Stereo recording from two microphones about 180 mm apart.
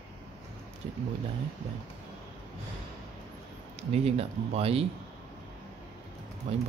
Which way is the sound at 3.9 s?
35° right (ahead or behind).